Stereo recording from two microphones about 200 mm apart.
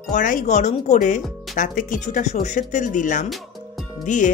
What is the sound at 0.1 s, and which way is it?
Speech, 40° left (ahead or behind).